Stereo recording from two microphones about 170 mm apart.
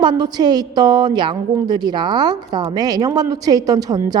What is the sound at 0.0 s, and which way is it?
A woman's voice, 25° right (ahead or behind).